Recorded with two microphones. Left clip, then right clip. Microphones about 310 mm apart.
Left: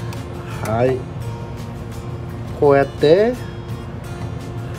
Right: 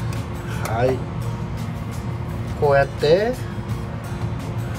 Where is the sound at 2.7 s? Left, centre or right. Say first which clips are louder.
Left 3 dB; left.